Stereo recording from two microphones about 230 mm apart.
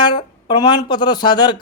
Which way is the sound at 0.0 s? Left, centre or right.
Centre.